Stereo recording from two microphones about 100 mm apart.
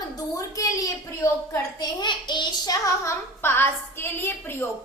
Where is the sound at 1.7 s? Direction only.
50° left (ahead or behind).